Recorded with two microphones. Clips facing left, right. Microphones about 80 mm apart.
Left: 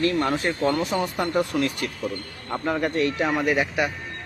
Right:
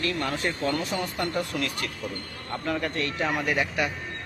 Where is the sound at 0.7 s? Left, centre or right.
Centre.